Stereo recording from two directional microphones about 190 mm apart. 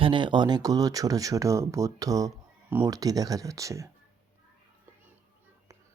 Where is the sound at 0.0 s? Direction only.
25° right (ahead or behind).